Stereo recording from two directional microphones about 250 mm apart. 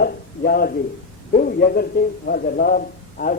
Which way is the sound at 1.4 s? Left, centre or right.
Left.